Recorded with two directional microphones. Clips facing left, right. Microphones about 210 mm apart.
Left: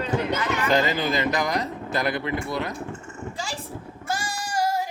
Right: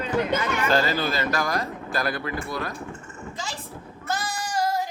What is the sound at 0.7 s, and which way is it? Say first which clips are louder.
Speech: left 1 dB; 20° left (ahead or behind).